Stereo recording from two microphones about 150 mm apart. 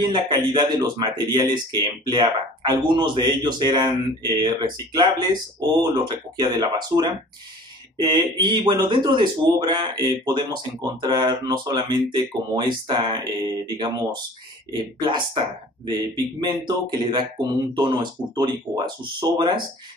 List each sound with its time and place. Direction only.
0.0 s speech: 30° right (ahead or behind)